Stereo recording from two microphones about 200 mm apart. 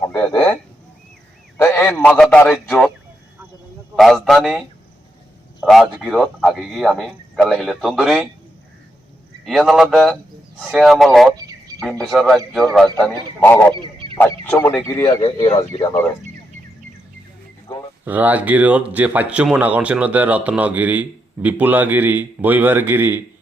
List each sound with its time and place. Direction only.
0.0 s speech: 10° left (ahead or behind)
1.5 s a man's voice: 10° left (ahead or behind)
3.9 s a man's voice: centre (ahead or behind)
9.4 s a man's voice: centre (ahead or behind)
11.3 s a sound: 20° right (ahead or behind)
11.8 s a man's voice: centre (ahead or behind)
13.4 s a man's voice: 10° left (ahead or behind)
13.7 s a sound: 25° right (ahead or behind)
14.4 s a man's voice: 10° left (ahead or behind)
18.0 s speech: 10° right (ahead or behind)